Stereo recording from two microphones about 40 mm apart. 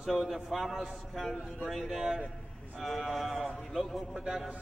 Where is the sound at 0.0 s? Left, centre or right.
Centre.